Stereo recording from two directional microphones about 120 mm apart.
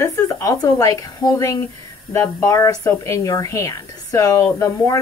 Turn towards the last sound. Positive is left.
turn(degrees=25)  # may be behind; listen again after turning